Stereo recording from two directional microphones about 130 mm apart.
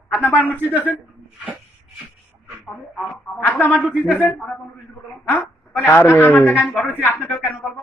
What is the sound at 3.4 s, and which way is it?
Speech, 10° left (ahead or behind).